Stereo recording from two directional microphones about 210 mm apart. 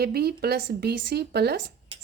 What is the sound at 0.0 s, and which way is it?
A woman's voice, 50° right (ahead or behind).